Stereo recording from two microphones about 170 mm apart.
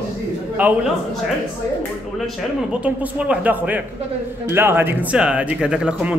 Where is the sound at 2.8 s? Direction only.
10° right (ahead or behind).